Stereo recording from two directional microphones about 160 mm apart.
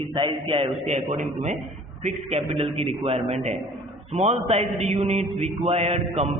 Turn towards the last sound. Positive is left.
turn(degrees=-40)  # may be behind; listen again after turning